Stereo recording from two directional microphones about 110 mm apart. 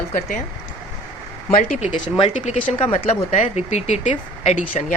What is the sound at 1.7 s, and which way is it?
Speech, 90° left.